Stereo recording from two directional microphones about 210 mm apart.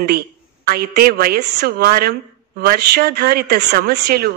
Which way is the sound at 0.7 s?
45° right (ahead or behind).